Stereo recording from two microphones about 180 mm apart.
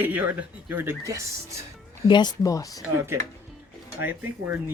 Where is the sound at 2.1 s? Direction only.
25° left (ahead or behind).